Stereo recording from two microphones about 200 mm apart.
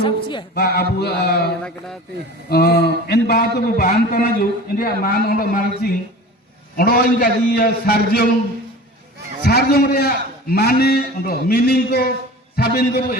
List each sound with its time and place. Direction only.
0.0 s speech: 25° left (ahead or behind)
0.5 s a man's voice: 50° left (ahead or behind)
2.5 s a man's voice: 50° left (ahead or behind)
9.5 s a man's voice: 50° left (ahead or behind)